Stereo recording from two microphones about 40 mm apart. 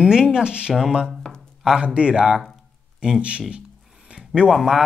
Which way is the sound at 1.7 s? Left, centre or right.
Right.